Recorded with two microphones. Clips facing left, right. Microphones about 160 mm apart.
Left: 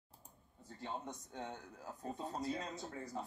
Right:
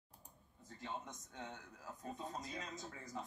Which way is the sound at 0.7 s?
30° left (ahead or behind).